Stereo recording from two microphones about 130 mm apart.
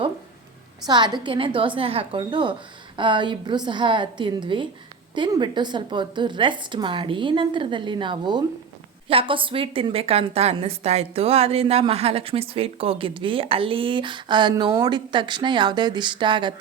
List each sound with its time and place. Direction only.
0.9 s a woman's voice: 35° right (ahead or behind)